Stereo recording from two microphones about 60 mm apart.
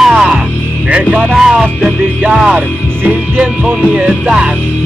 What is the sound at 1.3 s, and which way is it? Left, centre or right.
Music, centre.